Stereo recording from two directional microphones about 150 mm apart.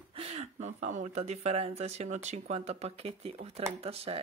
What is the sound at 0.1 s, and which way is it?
Speech, 40° right (ahead or behind).